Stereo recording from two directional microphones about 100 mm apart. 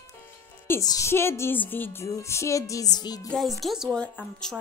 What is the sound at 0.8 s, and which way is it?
A woman's voice, 35° left (ahead or behind).